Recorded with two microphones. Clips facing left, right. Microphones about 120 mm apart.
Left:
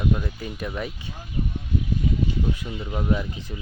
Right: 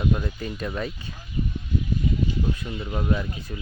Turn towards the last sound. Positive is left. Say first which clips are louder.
# left 1 dB
turn(degrees=15)  # may be behind; listen again after turning